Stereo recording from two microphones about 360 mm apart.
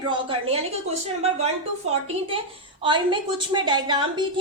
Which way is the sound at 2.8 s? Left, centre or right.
Centre.